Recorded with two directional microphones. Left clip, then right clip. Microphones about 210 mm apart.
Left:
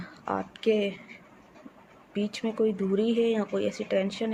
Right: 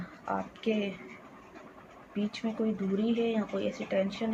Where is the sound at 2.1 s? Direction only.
55° left (ahead or behind).